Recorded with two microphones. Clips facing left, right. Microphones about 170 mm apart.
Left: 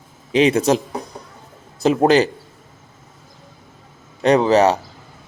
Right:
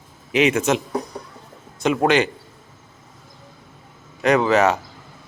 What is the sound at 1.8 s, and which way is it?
Speech, 35° left (ahead or behind).